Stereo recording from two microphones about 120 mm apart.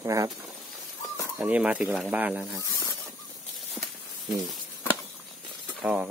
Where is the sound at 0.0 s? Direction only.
30° right (ahead or behind).